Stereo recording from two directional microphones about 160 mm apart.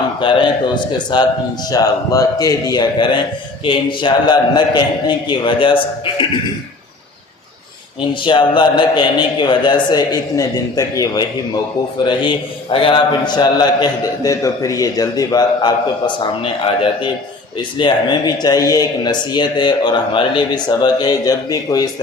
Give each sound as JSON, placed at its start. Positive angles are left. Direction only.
{"t": 0.2, "sound": "a man's voice", "side_deg": 30}
{"t": 8.2, "sound": "a man's voice", "side_deg": 30}